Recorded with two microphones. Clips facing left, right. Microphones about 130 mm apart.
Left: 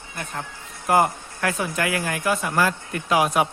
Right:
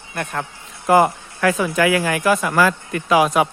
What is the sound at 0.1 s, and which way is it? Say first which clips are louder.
Speech: right 7 dB; 70° right (ahead or behind).